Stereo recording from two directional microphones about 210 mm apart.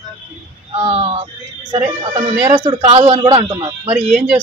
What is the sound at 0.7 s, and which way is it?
Speech, 25° right (ahead or behind).